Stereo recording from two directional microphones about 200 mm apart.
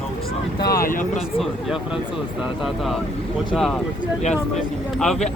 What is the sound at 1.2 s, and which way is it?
Speech, centre (ahead or behind).